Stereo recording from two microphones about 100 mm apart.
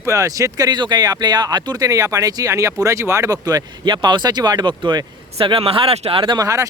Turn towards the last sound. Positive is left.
turn(degrees=-35)  # may be behind; listen again after turning